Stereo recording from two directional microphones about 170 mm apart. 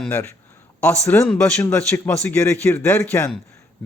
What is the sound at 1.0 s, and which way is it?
A man's voice, 10° left (ahead or behind).